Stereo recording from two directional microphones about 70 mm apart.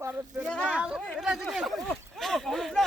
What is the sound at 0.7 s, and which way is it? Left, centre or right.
Speech, centre.